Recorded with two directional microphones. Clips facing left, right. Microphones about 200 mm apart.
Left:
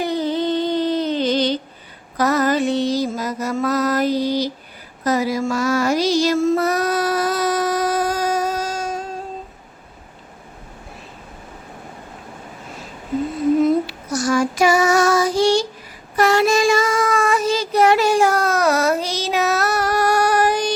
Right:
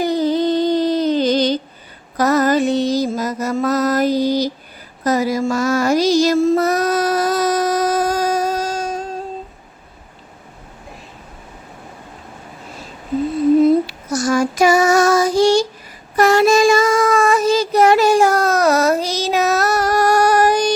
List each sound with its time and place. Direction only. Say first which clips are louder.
0.0 s a sound: right 4 dB; 40° right (ahead or behind)
2.1 s mantra: right 3 dB; 45° right (ahead or behind)
14.1 s child singing: right 1 dB; 45° right (ahead or behind)